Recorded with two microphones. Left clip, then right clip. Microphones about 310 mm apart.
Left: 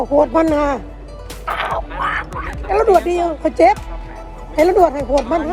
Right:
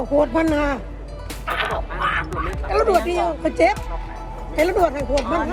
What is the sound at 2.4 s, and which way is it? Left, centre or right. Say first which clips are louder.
Speech: left 6 dB; left.